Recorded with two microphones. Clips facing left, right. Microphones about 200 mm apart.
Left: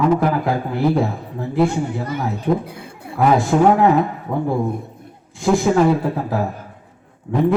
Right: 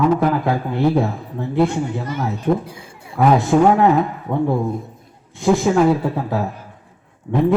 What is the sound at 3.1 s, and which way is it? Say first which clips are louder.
Speech: right 1 dB; centre (ahead or behind).